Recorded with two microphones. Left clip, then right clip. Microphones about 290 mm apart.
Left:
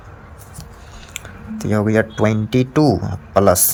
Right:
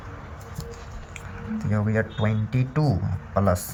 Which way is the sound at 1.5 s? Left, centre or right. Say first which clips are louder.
Left 10 dB; left.